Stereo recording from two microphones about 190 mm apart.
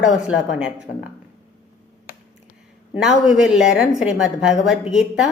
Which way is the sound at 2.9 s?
5° right (ahead or behind).